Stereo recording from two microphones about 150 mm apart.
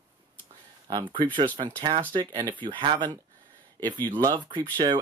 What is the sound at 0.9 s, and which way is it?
Speech, 30° right (ahead or behind).